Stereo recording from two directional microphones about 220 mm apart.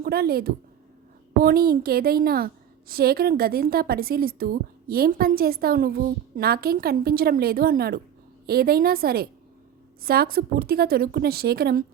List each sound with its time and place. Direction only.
0.0 s a woman's voice: 45° right (ahead or behind)